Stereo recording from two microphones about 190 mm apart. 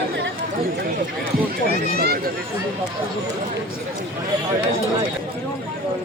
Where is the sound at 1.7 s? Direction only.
55° right (ahead or behind).